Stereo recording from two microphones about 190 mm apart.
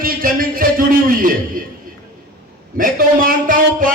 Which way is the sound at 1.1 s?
45° right (ahead or behind).